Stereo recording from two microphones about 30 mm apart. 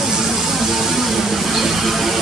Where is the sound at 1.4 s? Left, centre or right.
Centre.